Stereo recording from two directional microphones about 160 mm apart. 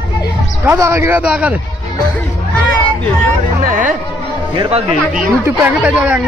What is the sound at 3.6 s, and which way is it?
Music, 55° right (ahead or behind).